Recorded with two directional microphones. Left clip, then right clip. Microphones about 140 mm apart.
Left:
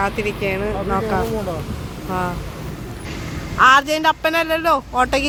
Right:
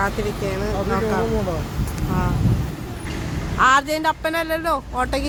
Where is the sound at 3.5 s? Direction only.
5° left (ahead or behind).